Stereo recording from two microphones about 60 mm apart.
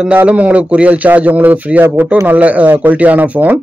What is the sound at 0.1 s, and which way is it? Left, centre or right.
A man's voice, right.